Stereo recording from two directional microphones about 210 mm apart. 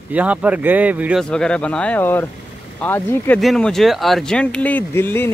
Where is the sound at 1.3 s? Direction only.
5° left (ahead or behind).